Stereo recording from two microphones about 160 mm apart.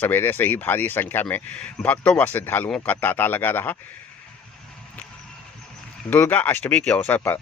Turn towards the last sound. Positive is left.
turn(degrees=10)  # may be behind; listen again after turning